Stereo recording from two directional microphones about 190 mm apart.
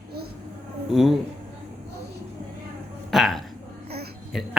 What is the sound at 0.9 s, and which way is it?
Speech, centre (ahead or behind).